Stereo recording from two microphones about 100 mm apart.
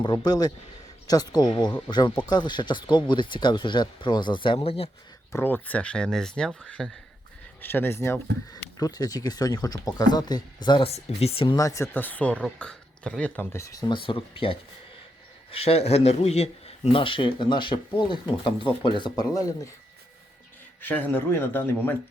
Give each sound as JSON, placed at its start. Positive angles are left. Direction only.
{"t": 0.0, "sound": "speech", "side_deg": 45}
{"t": 5.3, "sound": "speech", "side_deg": 20}
{"t": 7.6, "sound": "speech", "side_deg": 20}
{"t": 8.8, "sound": "speech", "side_deg": 40}
{"t": 10.8, "sound": "speech", "side_deg": 85}
{"t": 11.5, "sound": "speech", "side_deg": 30}
{"t": 11.9, "sound": "speech", "side_deg": 15}
{"t": 13.6, "sound": "speech", "side_deg": 35}
{"t": 13.9, "sound": "speech", "side_deg": 60}
{"t": 15.5, "sound": "speech", "side_deg": 85}
{"t": 20.8, "sound": "speech", "side_deg": 20}